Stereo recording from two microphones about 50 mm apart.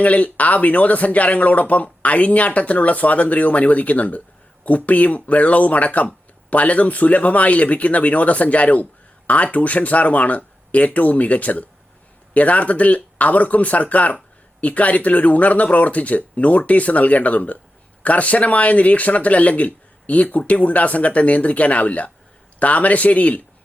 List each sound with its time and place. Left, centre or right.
0.0 s speech: left